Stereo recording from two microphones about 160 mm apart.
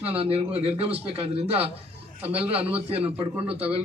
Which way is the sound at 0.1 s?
40° right (ahead or behind).